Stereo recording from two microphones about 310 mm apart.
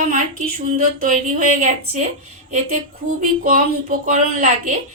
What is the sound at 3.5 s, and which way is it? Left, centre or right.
Speech, right.